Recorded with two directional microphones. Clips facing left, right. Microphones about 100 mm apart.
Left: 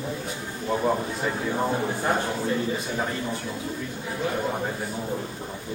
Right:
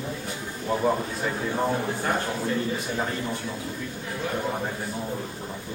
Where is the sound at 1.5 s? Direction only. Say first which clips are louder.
Even; 10° left (ahead or behind).